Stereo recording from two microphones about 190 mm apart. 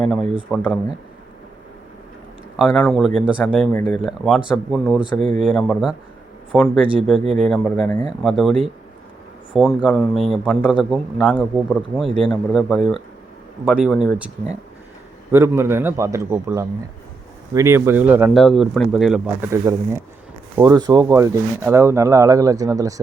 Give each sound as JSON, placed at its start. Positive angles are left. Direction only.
{"t": 0.0, "sound": "a man's voice", "side_deg": 0}
{"t": 2.6, "sound": "a man's voice", "side_deg": 0}
{"t": 4.0, "sound": "a man's voice", "side_deg": 0}
{"t": 15.3, "sound": "a man's voice", "side_deg": -15}